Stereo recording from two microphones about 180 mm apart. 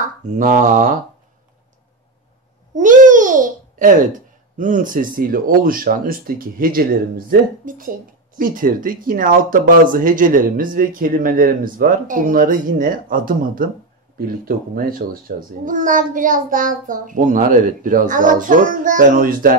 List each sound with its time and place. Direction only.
0.4 s a child's voice: 45° right (ahead or behind)
2.7 s babbling: 45° right (ahead or behind)
4.6 s a child's voice: 45° right (ahead or behind)